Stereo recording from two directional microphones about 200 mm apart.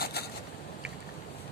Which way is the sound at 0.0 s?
55° left (ahead or behind).